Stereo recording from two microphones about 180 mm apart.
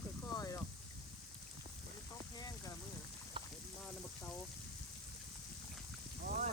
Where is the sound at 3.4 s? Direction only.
30° right (ahead or behind).